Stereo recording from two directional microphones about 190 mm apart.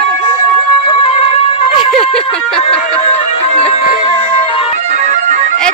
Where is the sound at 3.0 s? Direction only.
35° left (ahead or behind).